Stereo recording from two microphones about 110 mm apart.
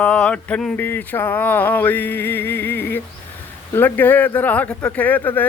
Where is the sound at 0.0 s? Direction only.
10° left (ahead or behind).